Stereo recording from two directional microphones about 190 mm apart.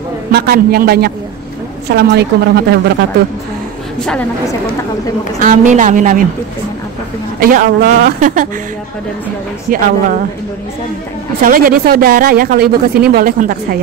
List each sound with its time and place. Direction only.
0.3 s a woman's voice: 55° right (ahead or behind)
5.4 s a woman's voice: 40° right (ahead or behind)
7.3 s a woman's voice: 45° right (ahead or behind)
9.7 s a woman's voice: 50° right (ahead or behind)
11.4 s a woman's voice: 50° right (ahead or behind)